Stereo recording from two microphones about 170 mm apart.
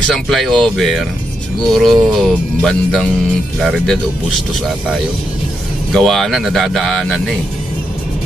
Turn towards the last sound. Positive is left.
turn(degrees=5)  # may be behind; listen again after turning